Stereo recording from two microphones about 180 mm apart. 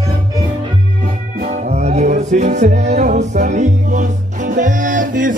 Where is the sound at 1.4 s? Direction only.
45° right (ahead or behind).